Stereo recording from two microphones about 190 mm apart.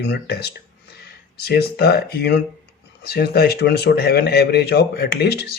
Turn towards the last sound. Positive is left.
turn(degrees=55)  # may be behind; listen again after turning